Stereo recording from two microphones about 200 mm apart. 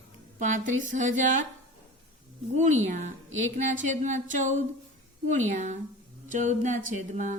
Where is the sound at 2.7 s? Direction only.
35° right (ahead or behind).